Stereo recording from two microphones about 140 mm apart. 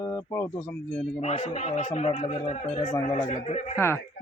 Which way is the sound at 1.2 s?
50° left (ahead or behind).